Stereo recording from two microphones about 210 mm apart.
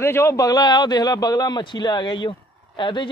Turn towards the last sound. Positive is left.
turn(degrees=20)  # may be behind; listen again after turning